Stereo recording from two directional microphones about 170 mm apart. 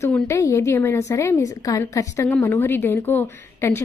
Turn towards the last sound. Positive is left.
turn(degrees=15)  # may be behind; listen again after turning